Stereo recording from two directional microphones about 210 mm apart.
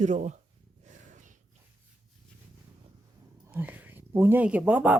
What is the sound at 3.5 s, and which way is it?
Speech, 10° right (ahead or behind).